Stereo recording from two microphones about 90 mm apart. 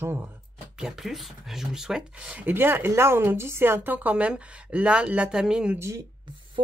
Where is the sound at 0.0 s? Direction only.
25° right (ahead or behind).